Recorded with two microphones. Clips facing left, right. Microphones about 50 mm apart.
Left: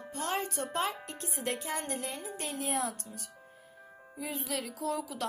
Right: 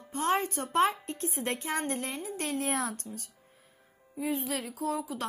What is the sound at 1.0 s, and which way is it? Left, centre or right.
Speech, left.